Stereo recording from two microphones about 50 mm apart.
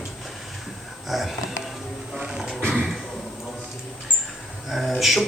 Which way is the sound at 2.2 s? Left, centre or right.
Centre.